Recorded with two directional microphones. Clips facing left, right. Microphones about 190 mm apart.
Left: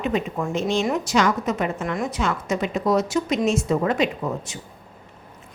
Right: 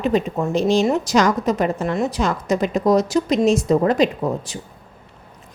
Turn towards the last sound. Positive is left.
turn(degrees=-35)  # may be behind; listen again after turning